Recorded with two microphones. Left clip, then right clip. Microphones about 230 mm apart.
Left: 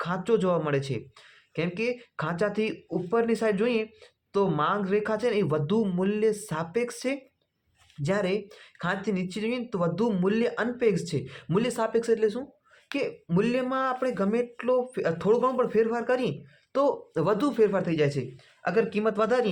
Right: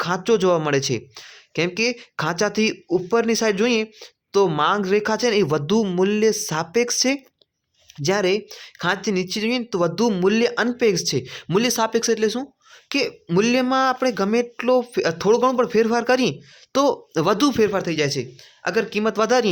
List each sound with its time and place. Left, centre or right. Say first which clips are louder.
0.0 s speech: right 7 dB; right